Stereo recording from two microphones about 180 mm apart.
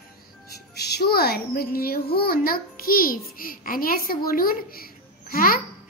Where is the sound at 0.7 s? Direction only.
65° left (ahead or behind).